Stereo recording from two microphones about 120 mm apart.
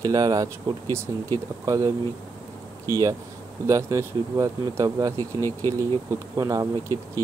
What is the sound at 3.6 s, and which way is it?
Speech, 30° right (ahead or behind).